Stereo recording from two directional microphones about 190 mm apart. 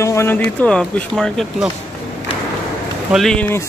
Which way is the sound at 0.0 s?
15° left (ahead or behind).